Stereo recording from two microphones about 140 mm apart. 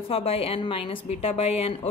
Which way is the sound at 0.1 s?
45° left (ahead or behind).